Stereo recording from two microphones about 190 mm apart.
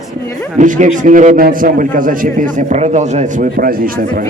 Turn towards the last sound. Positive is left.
turn(degrees=-50)  # may be behind; listen again after turning